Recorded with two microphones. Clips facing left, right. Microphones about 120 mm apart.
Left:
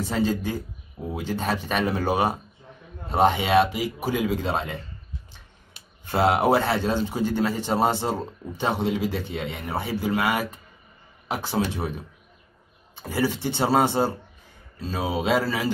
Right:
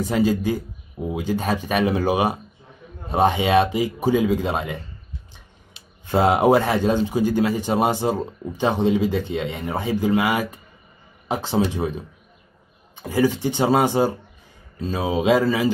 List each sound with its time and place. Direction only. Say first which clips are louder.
0.0 s a man's voice: right 4 dB; 15° right (ahead or behind)
6.0 s a man's voice: right 4 dB; 15° right (ahead or behind)